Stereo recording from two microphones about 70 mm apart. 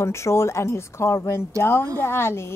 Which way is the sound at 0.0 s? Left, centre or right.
Left.